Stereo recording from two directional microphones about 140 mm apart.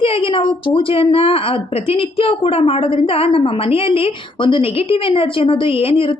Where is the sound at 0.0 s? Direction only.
40° left (ahead or behind).